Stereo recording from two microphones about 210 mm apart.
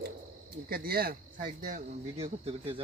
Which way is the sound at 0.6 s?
45° right (ahead or behind).